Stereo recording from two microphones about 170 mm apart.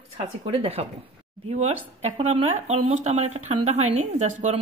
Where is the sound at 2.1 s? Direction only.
35° right (ahead or behind).